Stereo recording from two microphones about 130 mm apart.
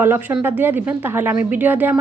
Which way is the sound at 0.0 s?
15° right (ahead or behind).